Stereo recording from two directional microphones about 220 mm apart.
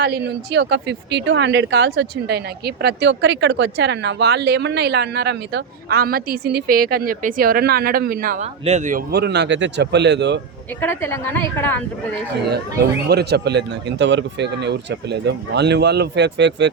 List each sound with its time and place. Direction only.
0.0 s speech: 50° right (ahead or behind)
10.8 s a woman's voice: 10° left (ahead or behind)
13.1 s speech: 45° right (ahead or behind)